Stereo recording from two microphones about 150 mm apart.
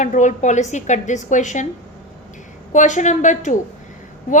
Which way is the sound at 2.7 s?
55° left (ahead or behind).